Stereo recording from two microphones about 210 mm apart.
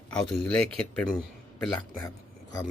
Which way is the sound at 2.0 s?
15° left (ahead or behind).